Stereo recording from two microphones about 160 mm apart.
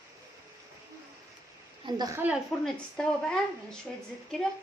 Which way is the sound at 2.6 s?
5° left (ahead or behind).